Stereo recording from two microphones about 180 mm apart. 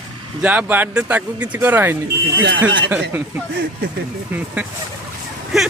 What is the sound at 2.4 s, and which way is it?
Speech, 85° right.